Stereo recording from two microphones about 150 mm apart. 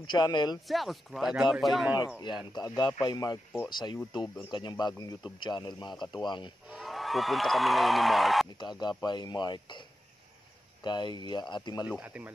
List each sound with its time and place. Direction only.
0.0 s speech: 30° left (ahead or behind)
0.7 s speech: centre (ahead or behind)
2.5 s speech: 25° left (ahead or behind)
6.7 s speech: centre (ahead or behind)
8.5 s speech: 30° left (ahead or behind)
12.0 s speech: 10° right (ahead or behind)